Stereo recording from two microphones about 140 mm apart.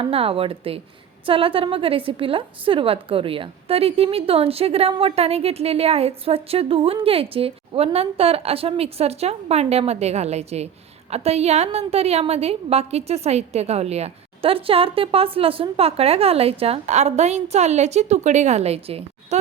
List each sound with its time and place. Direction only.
0.0 s a woman's voice: 40° right (ahead or behind)